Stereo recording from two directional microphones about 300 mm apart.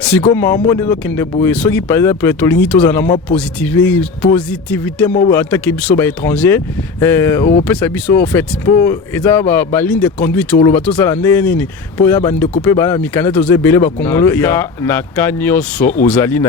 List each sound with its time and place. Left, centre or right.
0.4 s speech: left
1.0 s speech: centre
8.6 s speech: left
8.9 s speech: centre
15.8 s speech: left
16.0 s speech: centre